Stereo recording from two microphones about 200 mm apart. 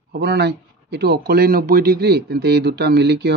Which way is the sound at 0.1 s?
55° right (ahead or behind).